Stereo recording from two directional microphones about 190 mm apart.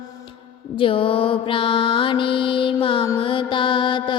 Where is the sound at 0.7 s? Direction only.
25° left (ahead or behind).